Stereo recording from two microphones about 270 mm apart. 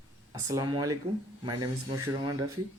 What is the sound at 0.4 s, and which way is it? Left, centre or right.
Speech, centre.